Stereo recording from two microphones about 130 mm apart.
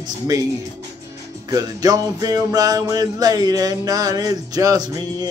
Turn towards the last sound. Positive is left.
turn(degrees=-30)  # may be behind; listen again after turning